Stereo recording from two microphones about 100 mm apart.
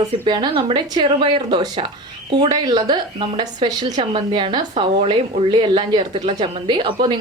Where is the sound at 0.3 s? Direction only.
50° right (ahead or behind).